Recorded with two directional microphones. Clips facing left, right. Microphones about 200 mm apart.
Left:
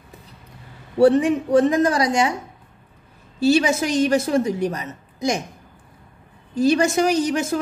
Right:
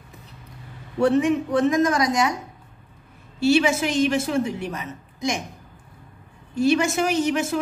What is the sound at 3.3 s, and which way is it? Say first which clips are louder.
A woman's voice: left 1 dB; 40° left (ahead or behind).